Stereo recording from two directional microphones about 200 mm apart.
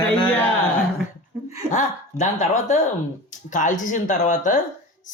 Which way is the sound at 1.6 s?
35° left (ahead or behind).